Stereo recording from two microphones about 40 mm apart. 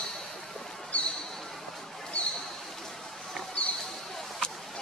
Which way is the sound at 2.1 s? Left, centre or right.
Left.